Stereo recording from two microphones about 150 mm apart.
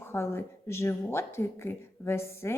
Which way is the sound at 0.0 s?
15° left (ahead or behind).